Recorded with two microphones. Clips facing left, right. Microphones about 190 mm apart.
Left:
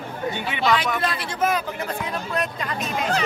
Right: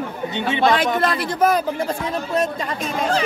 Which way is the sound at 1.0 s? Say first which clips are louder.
Right 6 dB; 45° right (ahead or behind).